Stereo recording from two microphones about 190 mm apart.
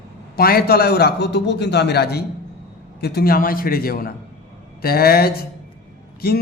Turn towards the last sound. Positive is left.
turn(degrees=55)  # may be behind; listen again after turning